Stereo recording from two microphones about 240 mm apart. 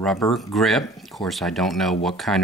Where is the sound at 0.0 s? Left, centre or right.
Centre.